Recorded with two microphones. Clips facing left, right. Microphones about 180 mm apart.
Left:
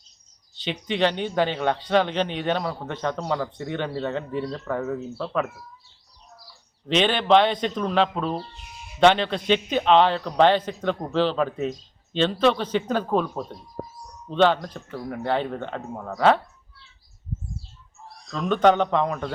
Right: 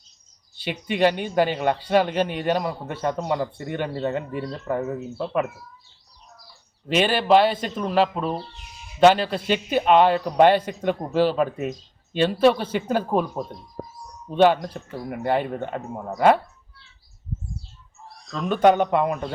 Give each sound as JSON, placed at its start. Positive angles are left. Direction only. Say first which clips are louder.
{"t": 0.5, "sound": "a man's voice", "louder": "even", "side_deg": -10}
{"t": 6.8, "sound": "a man's voice", "louder": "right 1 dB", "side_deg": -10}
{"t": 18.2, "sound": "a man's voice", "louder": "right 1 dB", "side_deg": 0}